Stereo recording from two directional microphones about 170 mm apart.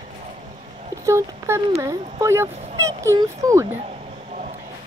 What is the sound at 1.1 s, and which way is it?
Speech, 15° right (ahead or behind).